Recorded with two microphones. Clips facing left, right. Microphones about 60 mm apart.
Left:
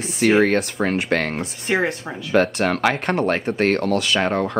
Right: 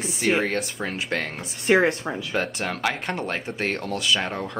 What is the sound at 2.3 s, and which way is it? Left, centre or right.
Speech, left.